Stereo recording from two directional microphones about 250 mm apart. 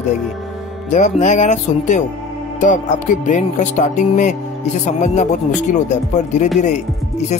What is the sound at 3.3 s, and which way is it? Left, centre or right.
Speech, left.